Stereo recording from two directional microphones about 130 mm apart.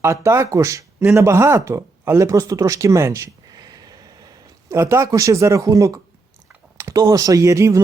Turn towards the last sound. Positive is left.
turn(degrees=-25)  # may be behind; listen again after turning